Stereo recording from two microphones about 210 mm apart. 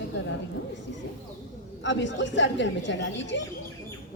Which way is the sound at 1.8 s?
60° left (ahead or behind).